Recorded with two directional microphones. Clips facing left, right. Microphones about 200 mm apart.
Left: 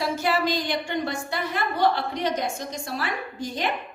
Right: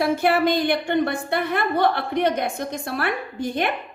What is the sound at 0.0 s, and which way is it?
A woman's voice, 60° right (ahead or behind).